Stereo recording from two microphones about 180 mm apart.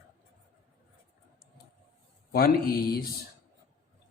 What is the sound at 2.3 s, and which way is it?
Speech, 55° left (ahead or behind).